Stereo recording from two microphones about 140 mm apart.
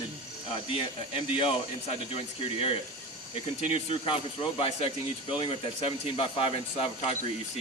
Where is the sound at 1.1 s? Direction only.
40° left (ahead or behind).